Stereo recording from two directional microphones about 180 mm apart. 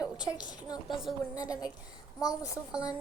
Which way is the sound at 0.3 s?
20° left (ahead or behind).